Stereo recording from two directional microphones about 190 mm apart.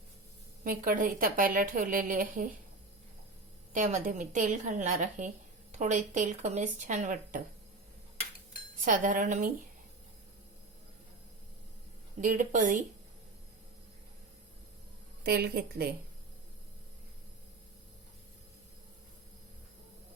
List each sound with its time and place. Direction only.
0.6 s a woman's voice: 45° right (ahead or behind)
3.7 s a woman's voice: 40° right (ahead or behind)
8.8 s a woman's voice: 45° right (ahead or behind)
12.2 s a woman's voice: 45° right (ahead or behind)
15.2 s a woman's voice: 55° right (ahead or behind)